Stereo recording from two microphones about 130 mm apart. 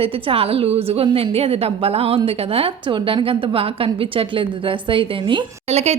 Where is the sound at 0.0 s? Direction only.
45° right (ahead or behind).